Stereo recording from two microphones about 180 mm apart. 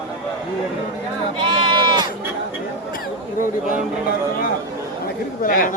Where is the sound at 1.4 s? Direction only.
25° right (ahead or behind).